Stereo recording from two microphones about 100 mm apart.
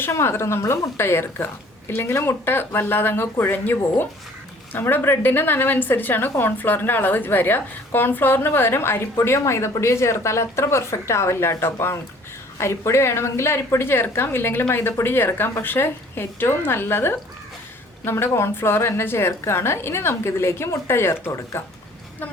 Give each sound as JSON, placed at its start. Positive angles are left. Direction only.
{"t": 0.0, "sound": "a woman's voice", "side_deg": 25}